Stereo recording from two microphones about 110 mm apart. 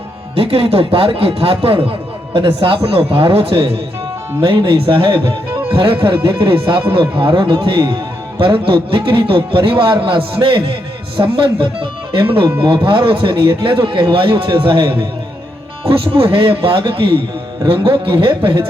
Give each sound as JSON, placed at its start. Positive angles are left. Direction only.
{"t": 0.3, "sound": "speech", "side_deg": -60}
{"t": 1.9, "sound": "a sound", "side_deg": -50}
{"t": 2.6, "sound": "a man's voice", "side_deg": -55}